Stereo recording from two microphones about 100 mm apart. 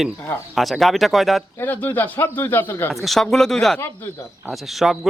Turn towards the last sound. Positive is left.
turn(degrees=0)  # may be behind; listen again after turning